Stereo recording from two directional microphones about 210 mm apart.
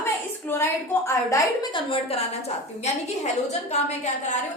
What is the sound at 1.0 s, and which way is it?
Speech, 15° left (ahead or behind).